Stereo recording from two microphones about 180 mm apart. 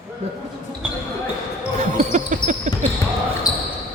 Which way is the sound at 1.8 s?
45° right (ahead or behind).